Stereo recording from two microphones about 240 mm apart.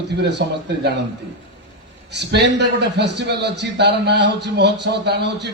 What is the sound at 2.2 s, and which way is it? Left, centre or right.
A man's voice, right.